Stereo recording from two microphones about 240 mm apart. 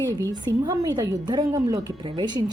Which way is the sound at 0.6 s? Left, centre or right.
Centre.